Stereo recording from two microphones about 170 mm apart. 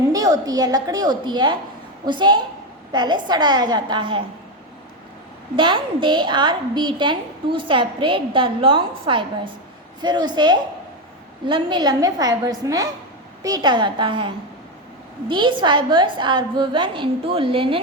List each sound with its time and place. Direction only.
0.1 s a woman's voice: 20° right (ahead or behind)
5.5 s a woman's voice: 30° right (ahead or behind)